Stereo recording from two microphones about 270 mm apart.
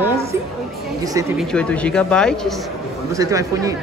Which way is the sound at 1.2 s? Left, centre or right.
Centre.